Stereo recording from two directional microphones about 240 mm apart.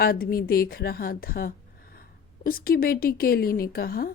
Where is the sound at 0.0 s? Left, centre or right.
Left.